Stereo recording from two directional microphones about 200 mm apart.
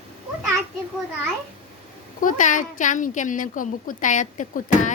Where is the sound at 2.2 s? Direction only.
40° left (ahead or behind).